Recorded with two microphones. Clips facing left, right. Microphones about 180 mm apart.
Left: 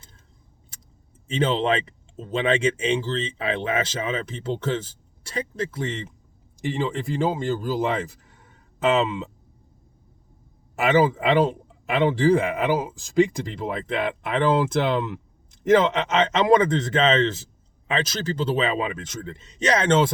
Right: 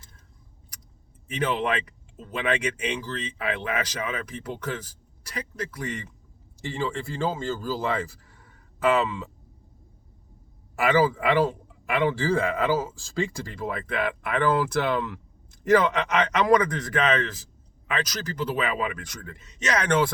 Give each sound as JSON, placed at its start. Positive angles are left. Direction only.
{"t": 1.3, "sound": "speech", "side_deg": 25}
{"t": 10.8, "sound": "speech", "side_deg": 20}